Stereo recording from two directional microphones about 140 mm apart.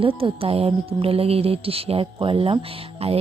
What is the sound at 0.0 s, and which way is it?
Speech, 40° right (ahead or behind).